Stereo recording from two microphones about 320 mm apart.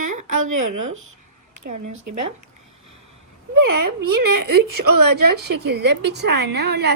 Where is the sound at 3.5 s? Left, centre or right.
Right.